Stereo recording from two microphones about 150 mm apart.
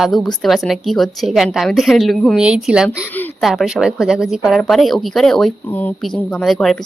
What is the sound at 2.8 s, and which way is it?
Speech, 10° left (ahead or behind).